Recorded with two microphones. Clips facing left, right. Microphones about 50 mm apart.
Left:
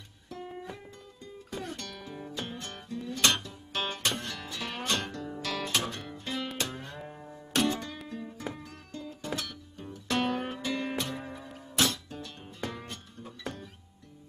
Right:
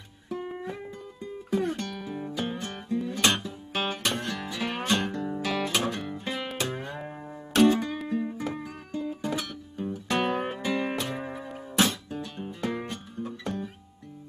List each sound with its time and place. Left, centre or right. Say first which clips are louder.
0.3 s music: right 7 dB; centre
8.5 s music: right 8 dB; centre
11.0 s music: right 3 dB; centre